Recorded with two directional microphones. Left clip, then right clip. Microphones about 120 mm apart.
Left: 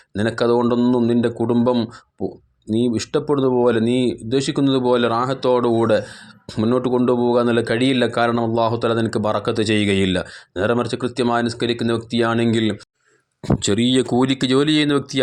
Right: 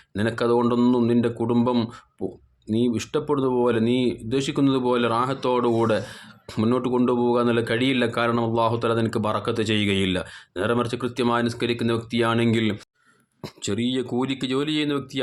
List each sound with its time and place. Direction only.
0.2 s speech: 30° left (ahead or behind)
0.8 s speech: 20° left (ahead or behind)
2.7 s speech: 30° left (ahead or behind)
13.6 s speech: 55° left (ahead or behind)
14.2 s speech: 45° left (ahead or behind)